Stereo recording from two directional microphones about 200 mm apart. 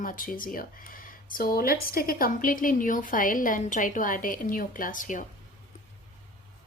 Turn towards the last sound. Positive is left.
turn(degrees=40)  # may be behind; listen again after turning